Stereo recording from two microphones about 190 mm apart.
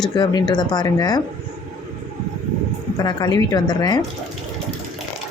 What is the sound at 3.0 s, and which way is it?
A woman's voice, 20° left (ahead or behind).